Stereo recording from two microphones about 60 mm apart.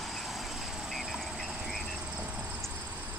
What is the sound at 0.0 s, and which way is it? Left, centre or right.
Vehicle, centre.